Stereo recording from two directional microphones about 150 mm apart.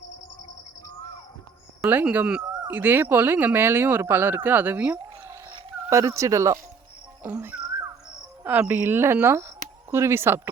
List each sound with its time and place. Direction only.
1.8 s speech: 10° right (ahead or behind)